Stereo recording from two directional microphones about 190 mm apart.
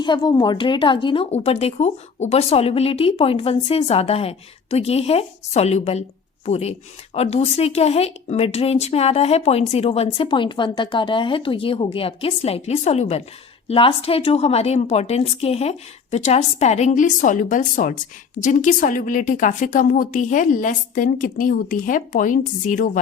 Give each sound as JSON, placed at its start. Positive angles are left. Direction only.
{"t": 0.0, "sound": "a woman's voice", "side_deg": 20}